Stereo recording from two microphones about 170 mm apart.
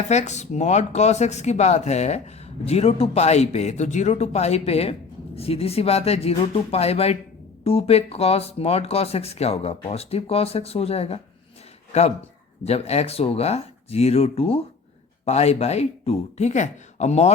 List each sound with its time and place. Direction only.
0.1 s speech: 40° left (ahead or behind)